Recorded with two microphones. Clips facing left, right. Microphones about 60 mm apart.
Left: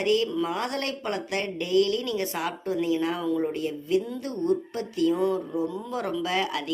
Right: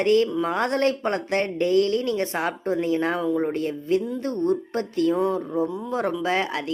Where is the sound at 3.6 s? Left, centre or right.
Right.